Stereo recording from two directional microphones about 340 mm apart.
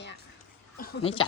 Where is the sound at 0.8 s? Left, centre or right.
Left.